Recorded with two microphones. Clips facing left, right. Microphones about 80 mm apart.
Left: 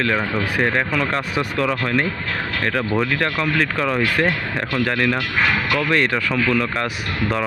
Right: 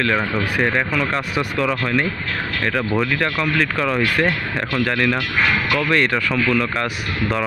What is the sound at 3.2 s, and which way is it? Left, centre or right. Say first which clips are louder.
Speech: even; left.